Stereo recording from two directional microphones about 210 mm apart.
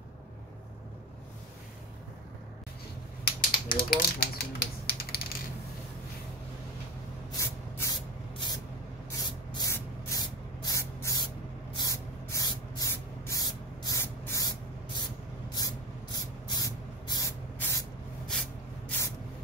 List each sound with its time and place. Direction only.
3.3 s typewriter: 45° left (ahead or behind)
7.3 s spray: 15° left (ahead or behind)
9.5 s spray: 15° left (ahead or behind)